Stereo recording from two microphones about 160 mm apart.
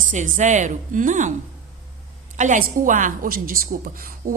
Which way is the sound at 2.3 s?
50° right (ahead or behind).